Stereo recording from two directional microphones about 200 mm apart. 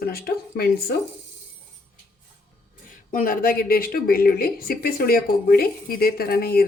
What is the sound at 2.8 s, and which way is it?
Speech, 45° left (ahead or behind).